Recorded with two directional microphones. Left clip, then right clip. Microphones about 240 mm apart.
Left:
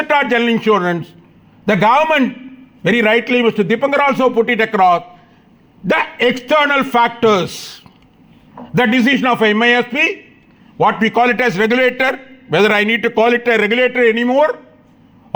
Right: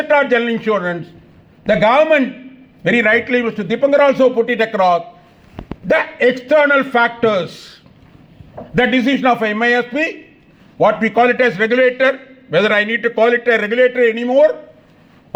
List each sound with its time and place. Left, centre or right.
0.0 s a man's voice: left